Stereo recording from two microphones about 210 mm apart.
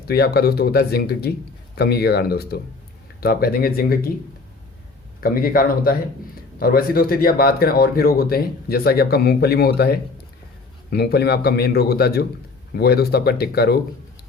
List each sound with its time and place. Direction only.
0.1 s speech: 50° left (ahead or behind)
5.2 s speech: 45° left (ahead or behind)